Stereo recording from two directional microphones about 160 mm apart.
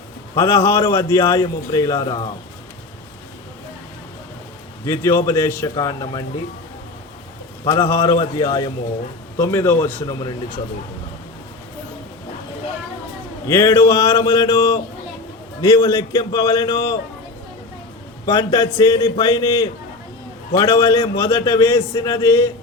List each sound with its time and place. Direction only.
0.3 s a man's voice: 15° left (ahead or behind)
4.9 s a man's voice: 15° left (ahead or behind)
7.7 s a man's voice: 15° left (ahead or behind)
9.4 s a man's voice: 15° left (ahead or behind)
10.2 s a man's voice: 25° left (ahead or behind)
13.5 s a man's voice: 15° left (ahead or behind)
18.3 s a man's voice: 20° left (ahead or behind)